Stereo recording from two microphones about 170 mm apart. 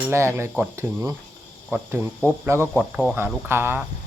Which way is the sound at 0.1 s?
15° right (ahead or behind).